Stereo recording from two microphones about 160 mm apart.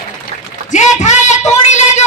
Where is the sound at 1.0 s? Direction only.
45° left (ahead or behind).